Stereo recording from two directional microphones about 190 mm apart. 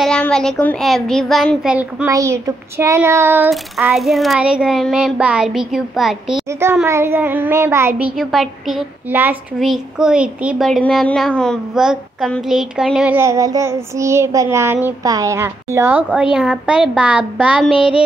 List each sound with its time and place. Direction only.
0.0 s speech: 5° left (ahead or behind); by 3.4 s 15° right (ahead or behind)
3.4 s a child's voice: centre (ahead or behind)
8.2 s a child's voice: centre (ahead or behind)
17.6 s a sound: 30° left (ahead or behind)